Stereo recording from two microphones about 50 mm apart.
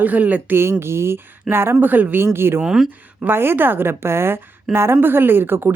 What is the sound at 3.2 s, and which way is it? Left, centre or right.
Speech, right.